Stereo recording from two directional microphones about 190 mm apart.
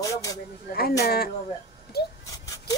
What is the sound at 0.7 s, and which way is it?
Speech, 50° left (ahead or behind).